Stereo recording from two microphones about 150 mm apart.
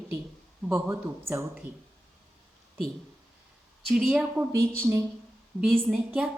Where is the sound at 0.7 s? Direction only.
15° right (ahead or behind).